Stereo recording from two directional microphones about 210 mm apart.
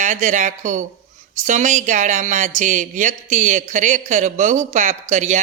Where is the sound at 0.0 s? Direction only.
35° right (ahead or behind).